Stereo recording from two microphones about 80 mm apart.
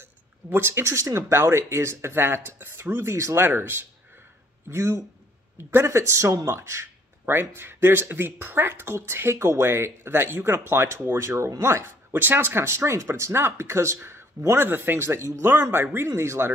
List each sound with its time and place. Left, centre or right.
0.0 s speech: right